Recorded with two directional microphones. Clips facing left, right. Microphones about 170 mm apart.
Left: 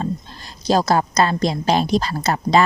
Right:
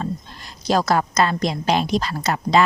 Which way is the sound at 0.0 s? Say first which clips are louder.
Left 2 dB; 30° left (ahead or behind).